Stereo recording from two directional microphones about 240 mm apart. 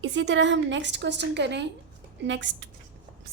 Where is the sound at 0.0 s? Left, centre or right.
Right.